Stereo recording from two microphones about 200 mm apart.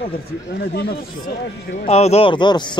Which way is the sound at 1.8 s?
30° left (ahead or behind).